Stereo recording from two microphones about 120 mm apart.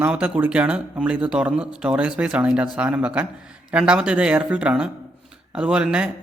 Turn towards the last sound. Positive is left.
turn(degrees=-10)  # may be behind; listen again after turning